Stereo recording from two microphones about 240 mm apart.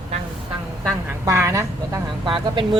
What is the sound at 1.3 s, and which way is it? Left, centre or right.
Speech, centre.